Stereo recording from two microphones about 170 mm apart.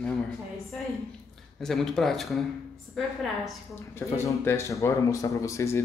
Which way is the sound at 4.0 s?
15° left (ahead or behind).